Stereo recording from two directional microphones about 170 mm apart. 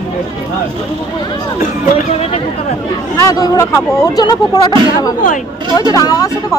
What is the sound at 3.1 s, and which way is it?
Speech, 20° left (ahead or behind).